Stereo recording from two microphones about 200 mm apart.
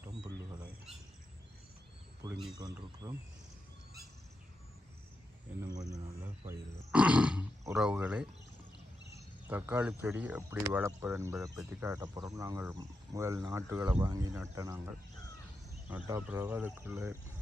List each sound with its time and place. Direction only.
0.9 s bird: centre (ahead or behind)
2.2 s speech: 20° right (ahead or behind)
5.6 s speech: 20° right (ahead or behind)